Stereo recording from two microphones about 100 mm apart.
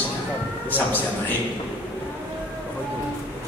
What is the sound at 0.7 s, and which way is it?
Speech, 20° left (ahead or behind).